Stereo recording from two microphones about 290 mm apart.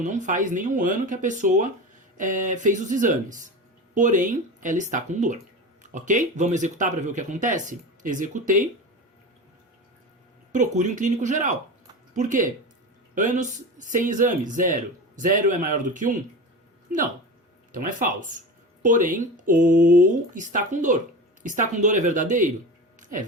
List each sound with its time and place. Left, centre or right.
0.0 s speech: right
10.5 s speech: right
17.7 s speech: right
23.0 s a sound: right